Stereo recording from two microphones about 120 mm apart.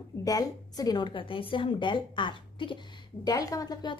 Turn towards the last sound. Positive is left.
turn(degrees=35)  # may be behind; listen again after turning